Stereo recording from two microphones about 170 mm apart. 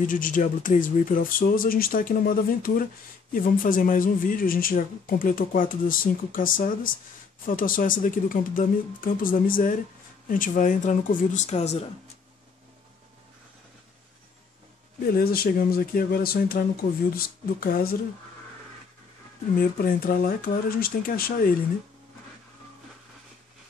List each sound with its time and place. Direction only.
0.0 s a woman's voice: 50° left (ahead or behind)
15.1 s a woman's voice: 65° left (ahead or behind)
19.5 s a woman's voice: 60° left (ahead or behind)